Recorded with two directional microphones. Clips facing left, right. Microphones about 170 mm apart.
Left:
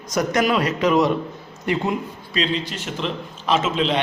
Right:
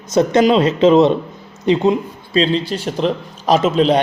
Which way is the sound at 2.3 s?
30° right (ahead or behind).